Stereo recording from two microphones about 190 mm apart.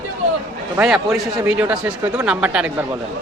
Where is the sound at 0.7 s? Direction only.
5° right (ahead or behind).